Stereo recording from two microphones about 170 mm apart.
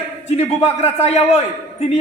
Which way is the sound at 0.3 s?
40° left (ahead or behind).